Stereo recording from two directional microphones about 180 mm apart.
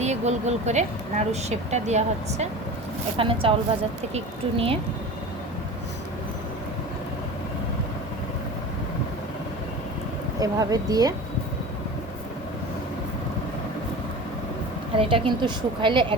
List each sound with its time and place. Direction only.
0.0 s a woman's voice: 40° right (ahead or behind)
10.4 s a woman's voice: 20° right (ahead or behind)
14.9 s a woman's voice: 30° right (ahead or behind)